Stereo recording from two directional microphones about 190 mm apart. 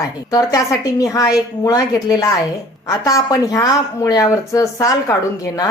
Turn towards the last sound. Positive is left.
turn(degrees=15)  # may be behind; listen again after turning